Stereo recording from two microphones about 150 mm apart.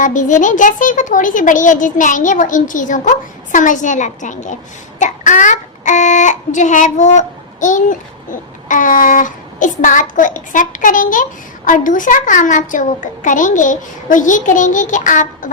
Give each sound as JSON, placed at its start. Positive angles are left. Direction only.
{"t": 0.0, "sound": "speech", "side_deg": 55}